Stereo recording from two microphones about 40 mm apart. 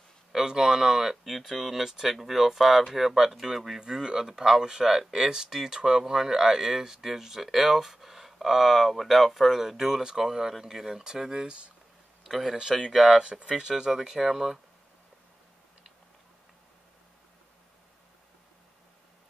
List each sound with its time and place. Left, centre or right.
0.3 s speech: centre
1.2 s speech: centre
3.8 s speech: centre
12.5 s speech: centre
12.9 s speech: centre
13.2 s speech: right; by 14.6 s centre